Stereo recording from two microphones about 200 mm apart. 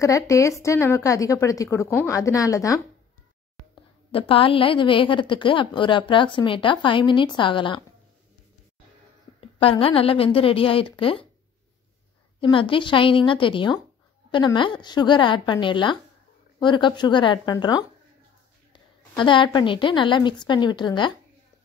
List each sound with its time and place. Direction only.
0.0 s a woman's voice: 15° left (ahead or behind)
4.1 s a woman's voice: 25° left (ahead or behind)
9.6 s a woman's voice: 25° left (ahead or behind)
12.4 s a woman's voice: 25° left (ahead or behind)